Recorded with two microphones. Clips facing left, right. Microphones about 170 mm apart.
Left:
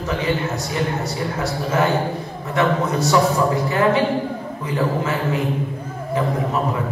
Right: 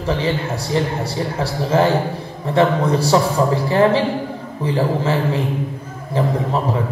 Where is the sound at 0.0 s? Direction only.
30° right (ahead or behind).